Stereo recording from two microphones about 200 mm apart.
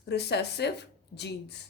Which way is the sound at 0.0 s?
55° left (ahead or behind).